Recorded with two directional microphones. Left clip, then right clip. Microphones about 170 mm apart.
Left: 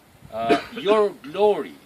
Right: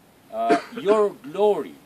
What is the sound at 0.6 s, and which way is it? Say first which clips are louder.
Speech: even; 50° left (ahead or behind).